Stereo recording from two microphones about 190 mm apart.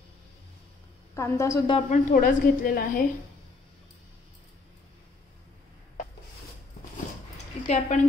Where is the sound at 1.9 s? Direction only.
45° left (ahead or behind).